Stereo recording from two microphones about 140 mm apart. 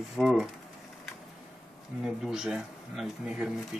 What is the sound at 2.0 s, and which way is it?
Speech, 5° right (ahead or behind).